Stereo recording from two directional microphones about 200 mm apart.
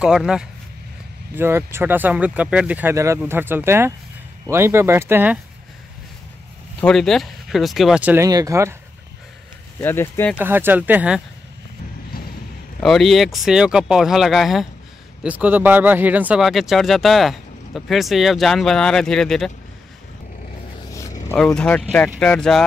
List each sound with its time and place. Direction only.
0.0 s a man's voice: 5° right (ahead or behind)
6.8 s a man's voice: centre (ahead or behind); by 8.7 s 15° right (ahead or behind)
9.8 s speech: 10° left (ahead or behind)
10.3 s speech: 10° right (ahead or behind)
12.8 s a man's voice: centre (ahead or behind)
20.9 s a sound: 15° left (ahead or behind)
21.4 s a man's voice: 5° left (ahead or behind)